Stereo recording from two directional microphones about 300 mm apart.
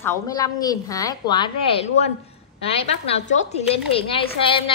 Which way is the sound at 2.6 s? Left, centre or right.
Centre.